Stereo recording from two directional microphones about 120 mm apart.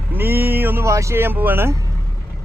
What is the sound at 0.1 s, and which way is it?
Speech, 20° right (ahead or behind).